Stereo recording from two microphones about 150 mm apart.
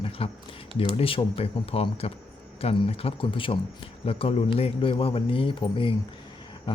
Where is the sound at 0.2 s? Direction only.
40° left (ahead or behind).